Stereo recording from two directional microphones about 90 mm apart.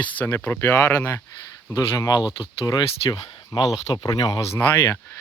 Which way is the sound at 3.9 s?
55° left (ahead or behind).